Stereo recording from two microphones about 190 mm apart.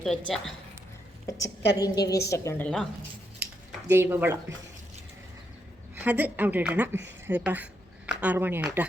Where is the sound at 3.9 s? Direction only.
10° right (ahead or behind).